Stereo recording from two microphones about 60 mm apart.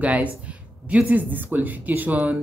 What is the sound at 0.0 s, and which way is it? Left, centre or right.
Speech, right.